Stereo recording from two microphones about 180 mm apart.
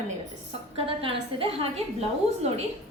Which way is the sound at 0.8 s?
30° right (ahead or behind).